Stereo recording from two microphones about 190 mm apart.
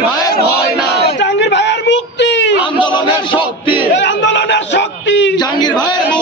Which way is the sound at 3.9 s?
70° left (ahead or behind).